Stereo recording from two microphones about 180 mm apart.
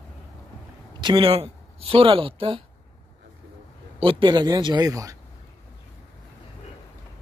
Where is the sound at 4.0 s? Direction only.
30° right (ahead or behind).